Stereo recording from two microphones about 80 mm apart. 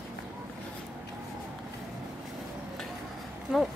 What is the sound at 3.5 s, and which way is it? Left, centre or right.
Speech, centre.